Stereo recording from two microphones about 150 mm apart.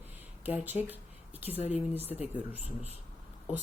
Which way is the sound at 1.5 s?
45° left (ahead or behind).